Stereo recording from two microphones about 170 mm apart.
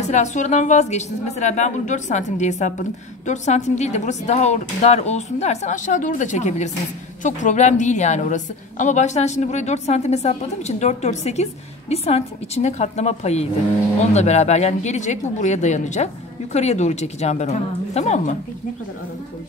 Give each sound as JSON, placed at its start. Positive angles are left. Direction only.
{"t": 0.0, "sound": "a woman's voice", "side_deg": 45}